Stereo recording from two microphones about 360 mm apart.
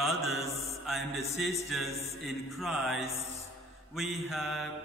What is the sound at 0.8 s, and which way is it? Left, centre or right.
Mantra, centre.